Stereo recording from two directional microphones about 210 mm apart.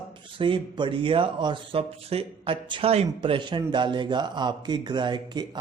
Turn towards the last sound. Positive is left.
turn(degrees=-20)  # may be behind; listen again after turning